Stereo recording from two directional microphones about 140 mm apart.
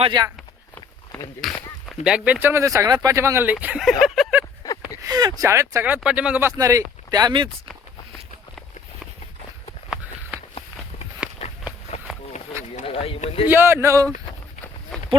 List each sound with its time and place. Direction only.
0.1 s speech: 30° right (ahead or behind)
1.4 s a sound: centre (ahead or behind)
2.0 s speech: 10° right (ahead or behind)
4.0 s a sound: centre (ahead or behind)
4.6 s a sound: 25° left (ahead or behind)
5.0 s speech: 30° right (ahead or behind)
5.8 s speech: 10° right (ahead or behind)
6.6 s speech: 25° right (ahead or behind)
10.3 s walk: 10° right (ahead or behind)
11.9 s run: 55° left (ahead or behind)
12.8 s speech: 40° left (ahead or behind)
13.5 s speech: 15° right (ahead or behind)
14.9 s a sound: centre (ahead or behind)